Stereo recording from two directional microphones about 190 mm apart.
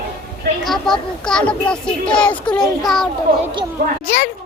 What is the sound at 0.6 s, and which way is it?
Speech, centre (ahead or behind).